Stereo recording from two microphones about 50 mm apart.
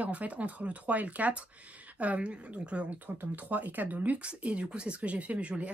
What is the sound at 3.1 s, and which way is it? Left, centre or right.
Speech, right.